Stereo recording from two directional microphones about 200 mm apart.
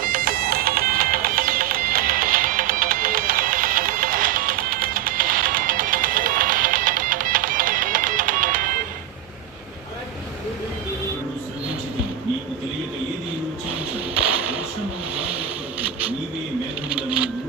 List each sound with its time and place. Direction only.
0.0 s music: 45° right (ahead or behind)